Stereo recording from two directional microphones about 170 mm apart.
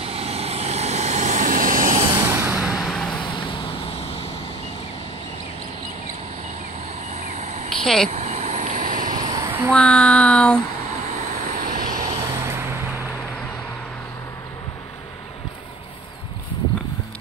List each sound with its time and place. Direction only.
0.0 s vehicle: 35° right (ahead or behind); by 2.0 s 50° right (ahead or behind)
2.0 s vehicle: 15° right (ahead or behind); by 3.2 s 5° left (ahead or behind)
3.2 s vehicle: 30° left (ahead or behind)
7.2 s a sound: 40° right (ahead or behind)
7.7 s speech: centre (ahead or behind)
8.1 s vehicle: 40° right (ahead or behind)
9.2 s a sound: 25° right (ahead or behind)
9.7 s child singing: 5° left (ahead or behind)
11.4 s vehicle: 55° right (ahead or behind)
12.2 s vehicle: 15° right (ahead or behind)